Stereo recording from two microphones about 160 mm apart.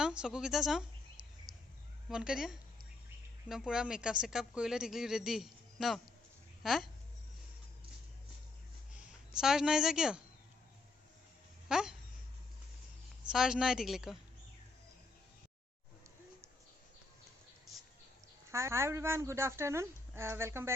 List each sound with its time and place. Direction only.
0.0 s speech: 5° right (ahead or behind)
1.2 s a sound: 5° right (ahead or behind)
2.0 s speech: 5° right (ahead or behind)
9.0 s speech: 5° right (ahead or behind)
11.7 s speech: 5° right (ahead or behind)
13.3 s speech: 5° right (ahead or behind)
18.5 s speech: 15° right (ahead or behind)